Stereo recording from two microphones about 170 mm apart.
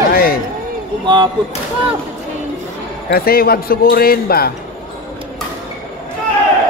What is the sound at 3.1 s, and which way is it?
Speech, 60° left (ahead or behind).